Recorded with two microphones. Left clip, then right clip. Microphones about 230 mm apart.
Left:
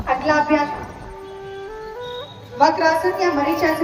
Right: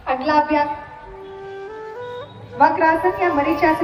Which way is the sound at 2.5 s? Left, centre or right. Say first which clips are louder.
Right 1 dB; centre.